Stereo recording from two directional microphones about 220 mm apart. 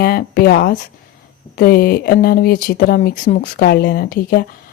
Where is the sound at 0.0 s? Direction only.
40° left (ahead or behind).